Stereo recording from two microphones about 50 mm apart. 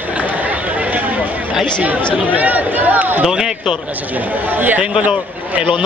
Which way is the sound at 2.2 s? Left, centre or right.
Right.